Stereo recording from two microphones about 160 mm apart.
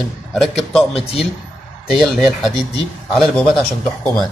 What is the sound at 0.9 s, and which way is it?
Speech, 40° left (ahead or behind).